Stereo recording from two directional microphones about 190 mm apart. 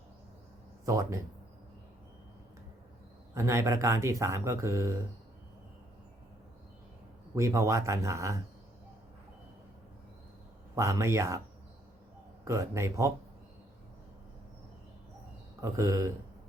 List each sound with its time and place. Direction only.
0.9 s speech: 15° right (ahead or behind)
3.3 s speech: 15° right (ahead or behind)
7.3 s speech: 15° right (ahead or behind)
10.8 s speech: 15° right (ahead or behind)
12.5 s speech: 15° right (ahead or behind)
15.6 s speech: 15° right (ahead or behind)